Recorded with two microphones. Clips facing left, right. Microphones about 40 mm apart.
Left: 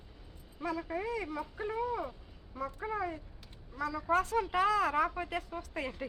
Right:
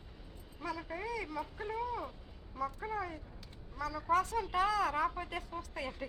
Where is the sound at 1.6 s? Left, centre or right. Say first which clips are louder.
Left 5 dB; centre; by 5.9 s left.